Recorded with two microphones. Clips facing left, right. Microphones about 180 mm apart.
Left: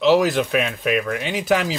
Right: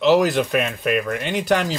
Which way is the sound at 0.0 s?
Centre (ahead or behind).